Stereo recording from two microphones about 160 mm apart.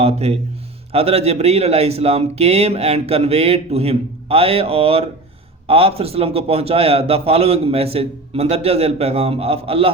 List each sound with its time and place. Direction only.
0.0 s a man's voice: 40° right (ahead or behind)